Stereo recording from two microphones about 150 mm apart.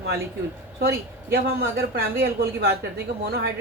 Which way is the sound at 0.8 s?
90° right.